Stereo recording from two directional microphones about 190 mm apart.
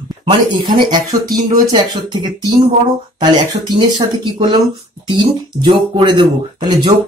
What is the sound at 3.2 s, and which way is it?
Speech, 20° right (ahead or behind).